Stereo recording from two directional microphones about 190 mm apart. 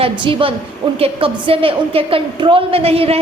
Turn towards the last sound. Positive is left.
turn(degrees=-30)  # may be behind; listen again after turning